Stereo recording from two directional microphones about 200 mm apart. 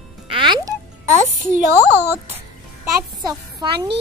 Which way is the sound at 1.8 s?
10° right (ahead or behind).